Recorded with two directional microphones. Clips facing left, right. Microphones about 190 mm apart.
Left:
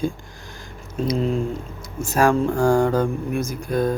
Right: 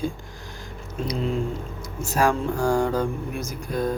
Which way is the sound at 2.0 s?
50° left (ahead or behind).